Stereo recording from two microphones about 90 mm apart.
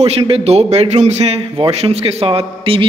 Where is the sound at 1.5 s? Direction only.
80° right.